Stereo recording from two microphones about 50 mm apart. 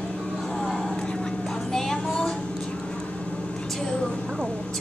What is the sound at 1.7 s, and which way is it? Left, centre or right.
Music, centre.